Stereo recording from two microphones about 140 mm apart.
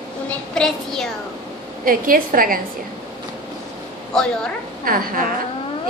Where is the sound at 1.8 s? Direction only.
90° right.